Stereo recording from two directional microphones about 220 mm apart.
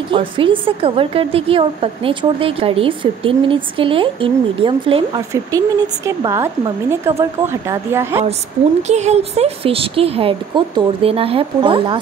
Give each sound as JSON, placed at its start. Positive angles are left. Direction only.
{"t": 0.1, "sound": "a woman's voice", "side_deg": -25}
{"t": 8.8, "sound": "a woman's voice", "side_deg": -30}